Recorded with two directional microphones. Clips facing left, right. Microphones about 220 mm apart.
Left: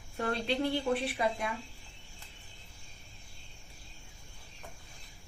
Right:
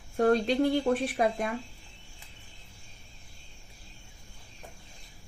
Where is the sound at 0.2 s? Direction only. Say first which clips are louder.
Right 8 dB; 45° right (ahead or behind).